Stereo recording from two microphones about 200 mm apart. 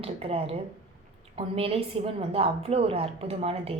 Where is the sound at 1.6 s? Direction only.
30° right (ahead or behind).